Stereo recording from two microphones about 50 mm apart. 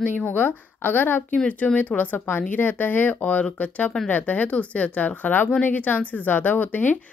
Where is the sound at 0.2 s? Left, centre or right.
Left.